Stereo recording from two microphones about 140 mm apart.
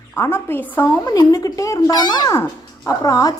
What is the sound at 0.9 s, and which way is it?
A woman's voice, 30° left (ahead or behind).